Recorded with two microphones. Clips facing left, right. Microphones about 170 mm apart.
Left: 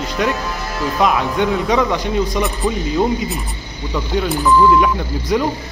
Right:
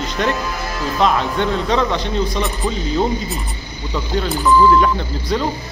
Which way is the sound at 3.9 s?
Centre (ahead or behind).